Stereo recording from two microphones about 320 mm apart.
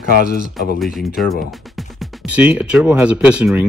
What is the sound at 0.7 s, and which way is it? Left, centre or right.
Speech, centre.